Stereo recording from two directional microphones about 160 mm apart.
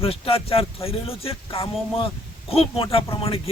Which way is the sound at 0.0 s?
35° left (ahead or behind).